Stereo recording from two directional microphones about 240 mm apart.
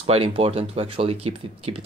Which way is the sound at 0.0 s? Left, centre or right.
Right.